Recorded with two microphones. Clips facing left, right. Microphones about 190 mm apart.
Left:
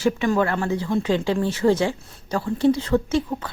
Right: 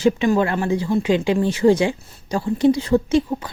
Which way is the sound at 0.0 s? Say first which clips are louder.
Right 3 dB; 20° right (ahead or behind).